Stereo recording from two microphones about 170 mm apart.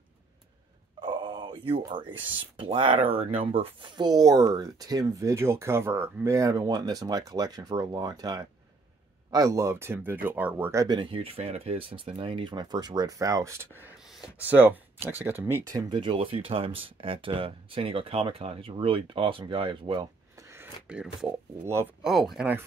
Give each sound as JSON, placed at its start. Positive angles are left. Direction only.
{"t": 1.0, "sound": "a sound", "side_deg": -25}
{"t": 2.5, "sound": "speech", "side_deg": -30}
{"t": 13.8, "sound": "speech", "side_deg": -5}
{"t": 15.9, "sound": "speech", "side_deg": -30}
{"t": 20.8, "sound": "speech", "side_deg": -5}